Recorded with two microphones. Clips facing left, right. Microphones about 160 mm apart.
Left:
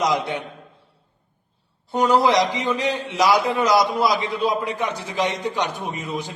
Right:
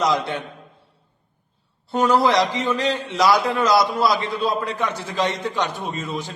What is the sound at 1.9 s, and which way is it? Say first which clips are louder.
A man's voice: even; 15° left (ahead or behind).